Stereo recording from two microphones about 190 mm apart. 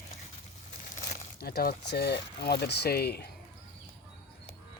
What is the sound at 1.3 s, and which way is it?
Speech, 55° left (ahead or behind).